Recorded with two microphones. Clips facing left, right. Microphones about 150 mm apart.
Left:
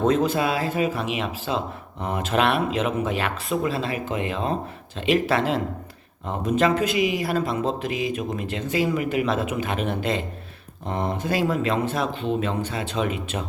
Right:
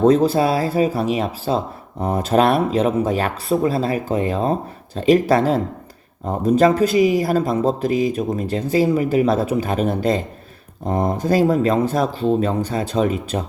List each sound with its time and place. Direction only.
0.0 s speech: 35° right (ahead or behind)